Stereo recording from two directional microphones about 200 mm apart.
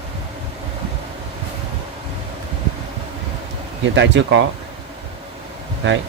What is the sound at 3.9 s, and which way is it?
Speech, 65° right (ahead or behind).